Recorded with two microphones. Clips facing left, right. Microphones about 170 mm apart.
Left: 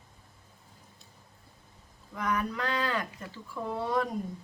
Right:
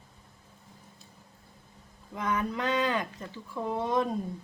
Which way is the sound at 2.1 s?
20° right (ahead or behind).